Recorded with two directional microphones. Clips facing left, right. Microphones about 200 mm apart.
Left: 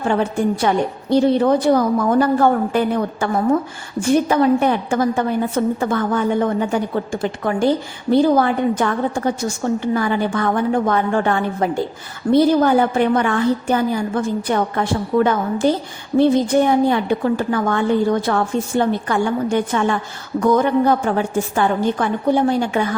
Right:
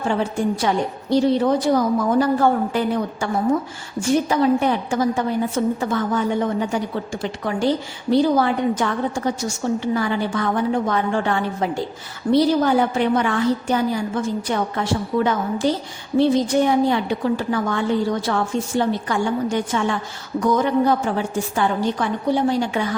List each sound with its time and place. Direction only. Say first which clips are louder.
0.1 s a woman's voice: left 3 dB; 60° left (ahead or behind)
4.3 s a woman's voice: left 3 dB; 55° left (ahead or behind)